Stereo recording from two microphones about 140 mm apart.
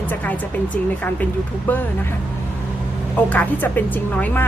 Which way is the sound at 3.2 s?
10° left (ahead or behind).